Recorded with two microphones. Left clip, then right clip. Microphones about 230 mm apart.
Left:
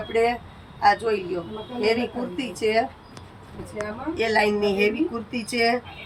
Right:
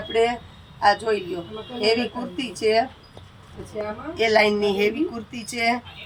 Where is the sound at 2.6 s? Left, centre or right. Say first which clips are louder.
Right 2 dB; centre.